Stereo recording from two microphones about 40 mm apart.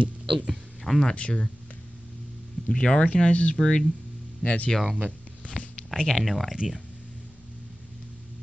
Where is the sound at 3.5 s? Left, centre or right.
Centre.